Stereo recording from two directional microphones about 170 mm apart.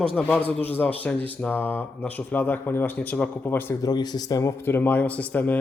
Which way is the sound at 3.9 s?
25° left (ahead or behind).